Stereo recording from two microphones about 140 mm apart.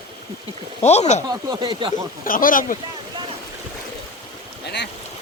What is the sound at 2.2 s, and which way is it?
Speech, 80° left.